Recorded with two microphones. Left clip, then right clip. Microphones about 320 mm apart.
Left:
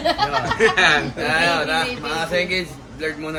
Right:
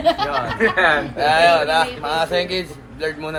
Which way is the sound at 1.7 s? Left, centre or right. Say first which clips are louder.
Right 4 dB; centre.